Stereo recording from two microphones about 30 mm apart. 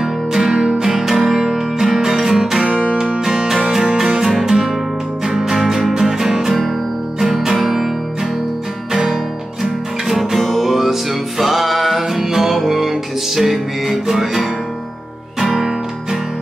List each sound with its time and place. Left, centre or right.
0.0 s music: centre
0.6 s music: right
0.8 s music: centre
8.9 s music: centre